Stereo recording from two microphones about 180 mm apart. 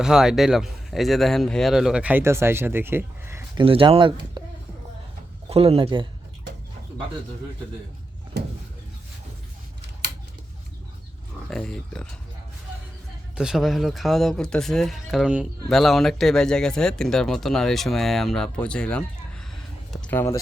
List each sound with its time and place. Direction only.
0.0 s speech: 5° right (ahead or behind)
3.6 s speech: 30° right (ahead or behind)
5.5 s speech: 30° right (ahead or behind)
10.0 s scissors: 65° right (ahead or behind)
11.4 s speech: 5° left (ahead or behind)
13.3 s speech: 5° right (ahead or behind)
19.9 s a sound: 5° left (ahead or behind)